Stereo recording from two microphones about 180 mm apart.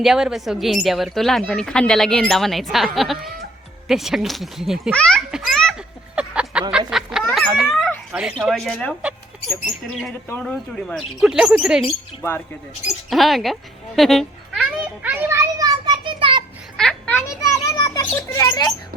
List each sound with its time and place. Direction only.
0.0 s a woman's voice: centre (ahead or behind)
6.1 s a sound: 5° right (ahead or behind)
7.3 s speech: centre (ahead or behind)
10.4 s a woman's voice: centre (ahead or behind)
13.1 s a sound: centre (ahead or behind); by 16.4 s 25° right (ahead or behind)
16.7 s children playing: 5° left (ahead or behind)